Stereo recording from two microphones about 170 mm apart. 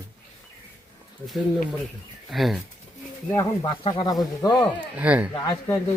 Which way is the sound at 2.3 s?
Centre (ahead or behind).